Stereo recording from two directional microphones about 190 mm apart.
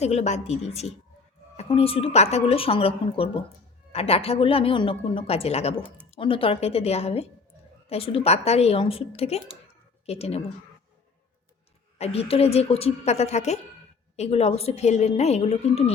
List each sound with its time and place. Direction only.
0.0 s a woman's voice: 35° left (ahead or behind)
11.9 s speech: 30° left (ahead or behind)